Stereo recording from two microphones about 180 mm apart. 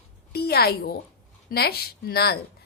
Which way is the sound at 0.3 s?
60° left (ahead or behind).